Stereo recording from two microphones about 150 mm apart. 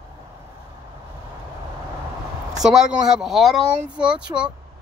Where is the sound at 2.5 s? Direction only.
5° right (ahead or behind).